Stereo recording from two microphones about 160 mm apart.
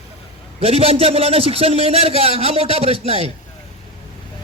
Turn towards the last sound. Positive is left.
turn(degrees=-40)  # may be behind; listen again after turning